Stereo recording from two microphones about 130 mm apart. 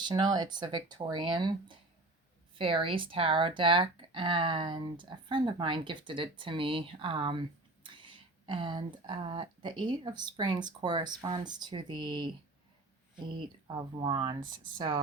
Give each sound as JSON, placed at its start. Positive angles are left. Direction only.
{"t": 0.0, "sound": "speech", "side_deg": -35}
{"t": 13.7, "sound": "speech", "side_deg": -35}